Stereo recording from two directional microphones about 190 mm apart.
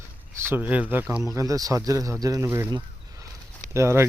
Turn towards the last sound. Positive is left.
turn(degrees=-15)  # may be behind; listen again after turning